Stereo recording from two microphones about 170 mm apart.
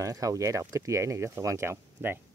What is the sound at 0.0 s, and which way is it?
Speech, 20° right (ahead or behind).